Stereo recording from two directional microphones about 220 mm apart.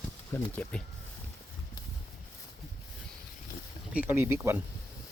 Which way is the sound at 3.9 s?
10° right (ahead or behind).